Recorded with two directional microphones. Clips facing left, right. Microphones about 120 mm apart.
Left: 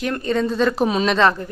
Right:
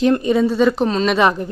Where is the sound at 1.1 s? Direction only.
15° right (ahead or behind).